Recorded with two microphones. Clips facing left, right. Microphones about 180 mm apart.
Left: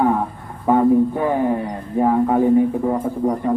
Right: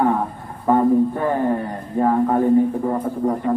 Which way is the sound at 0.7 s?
10° left (ahead or behind).